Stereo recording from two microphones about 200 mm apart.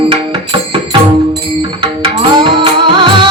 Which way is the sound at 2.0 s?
25° right (ahead or behind).